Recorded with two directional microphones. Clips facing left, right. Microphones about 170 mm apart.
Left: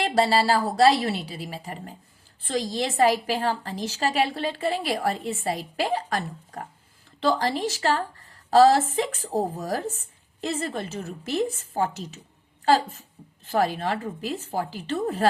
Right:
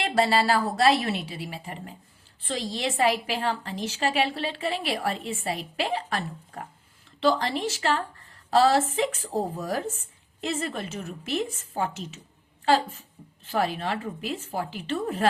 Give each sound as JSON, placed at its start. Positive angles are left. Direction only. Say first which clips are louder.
{"t": 0.0, "sound": "a woman's voice", "louder": "left 2 dB", "side_deg": 35}